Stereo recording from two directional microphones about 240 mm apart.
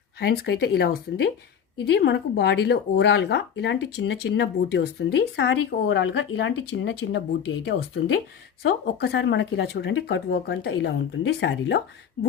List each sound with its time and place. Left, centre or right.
0.2 s speech: left